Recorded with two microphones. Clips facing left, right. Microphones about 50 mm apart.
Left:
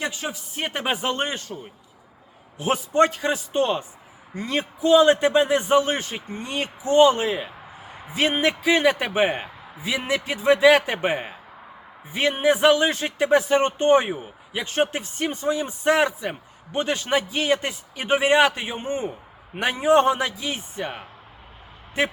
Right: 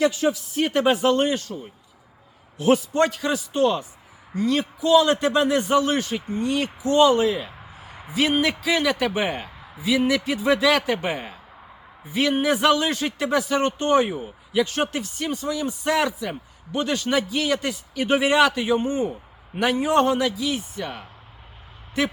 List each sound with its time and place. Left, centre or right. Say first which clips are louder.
0.0 s a man's voice: right 8 dB; centre
2.6 s a man's voice: right 1 dB; centre